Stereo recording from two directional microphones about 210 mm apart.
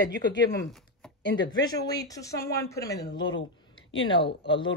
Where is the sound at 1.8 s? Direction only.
20° left (ahead or behind).